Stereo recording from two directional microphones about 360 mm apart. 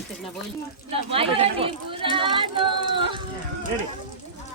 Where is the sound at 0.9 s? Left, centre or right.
Centre.